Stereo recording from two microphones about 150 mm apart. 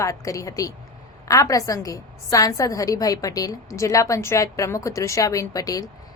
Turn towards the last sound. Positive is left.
turn(degrees=25)  # may be behind; listen again after turning